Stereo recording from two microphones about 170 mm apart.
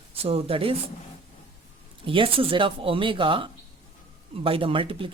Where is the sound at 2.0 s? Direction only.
30° right (ahead or behind).